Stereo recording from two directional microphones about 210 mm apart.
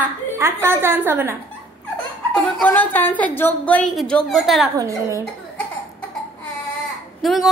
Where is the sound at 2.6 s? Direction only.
10° left (ahead or behind).